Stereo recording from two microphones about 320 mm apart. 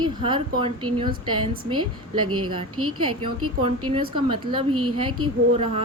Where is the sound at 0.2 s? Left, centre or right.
Centre.